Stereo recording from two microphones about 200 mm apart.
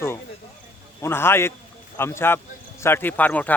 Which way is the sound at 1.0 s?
10° left (ahead or behind).